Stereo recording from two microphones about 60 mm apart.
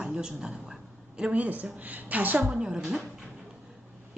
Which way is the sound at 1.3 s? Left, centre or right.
Right.